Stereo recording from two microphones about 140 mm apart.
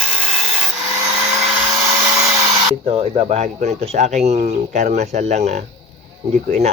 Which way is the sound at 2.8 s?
45° right (ahead or behind).